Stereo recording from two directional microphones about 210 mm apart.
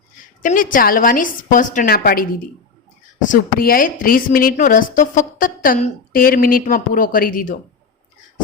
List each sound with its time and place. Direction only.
0.4 s a woman's voice: 40° left (ahead or behind)
3.2 s a woman's voice: 40° left (ahead or behind)